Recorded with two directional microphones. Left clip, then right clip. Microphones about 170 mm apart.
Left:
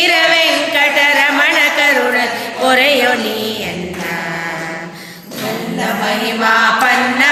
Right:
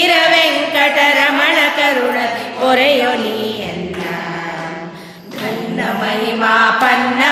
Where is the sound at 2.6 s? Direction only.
5° right (ahead or behind).